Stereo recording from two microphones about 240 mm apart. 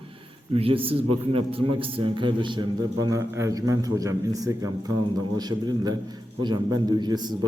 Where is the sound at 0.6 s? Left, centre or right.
Right.